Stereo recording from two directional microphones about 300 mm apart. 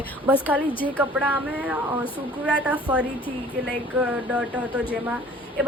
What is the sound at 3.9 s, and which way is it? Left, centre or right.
Speech, centre.